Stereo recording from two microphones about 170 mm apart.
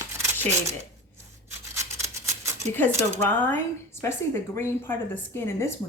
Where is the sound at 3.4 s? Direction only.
15° left (ahead or behind).